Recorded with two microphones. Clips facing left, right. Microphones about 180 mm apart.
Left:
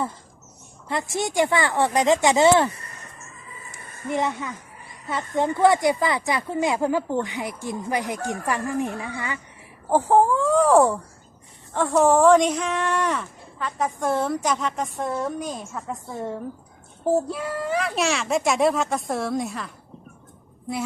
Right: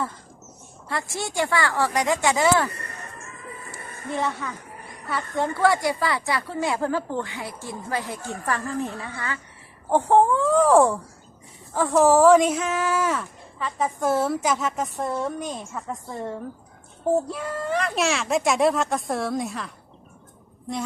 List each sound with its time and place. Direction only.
0.9 s speech: 20° left (ahead or behind)
2.7 s music: 65° right (ahead or behind)
4.1 s speech: 15° left (ahead or behind)
9.9 s speech: 5° left (ahead or behind)